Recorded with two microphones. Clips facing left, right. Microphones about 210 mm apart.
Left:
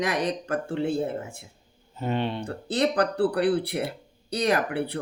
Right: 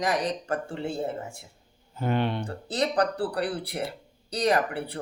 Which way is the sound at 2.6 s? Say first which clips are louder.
Left 2 dB; 60° left (ahead or behind).